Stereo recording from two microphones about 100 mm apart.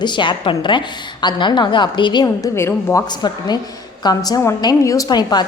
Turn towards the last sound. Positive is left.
turn(degrees=45)  # may be behind; listen again after turning